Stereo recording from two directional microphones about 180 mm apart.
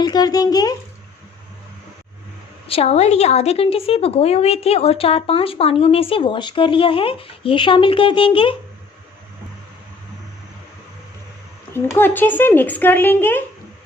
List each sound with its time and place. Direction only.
0.0 s speech: 20° left (ahead or behind)
2.6 s a woman's voice: 35° left (ahead or behind)
11.9 s speech: 10° left (ahead or behind)